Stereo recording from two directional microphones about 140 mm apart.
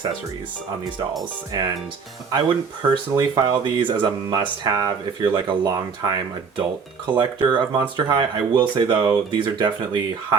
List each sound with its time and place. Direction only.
2.3 s speech: 35° right (ahead or behind)
7.1 s speech: 35° right (ahead or behind)